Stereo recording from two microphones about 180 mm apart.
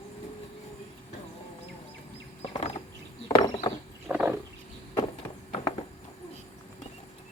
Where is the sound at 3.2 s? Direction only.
20° left (ahead or behind).